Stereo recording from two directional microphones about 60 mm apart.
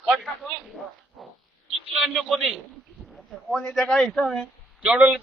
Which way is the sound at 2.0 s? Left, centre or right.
Centre.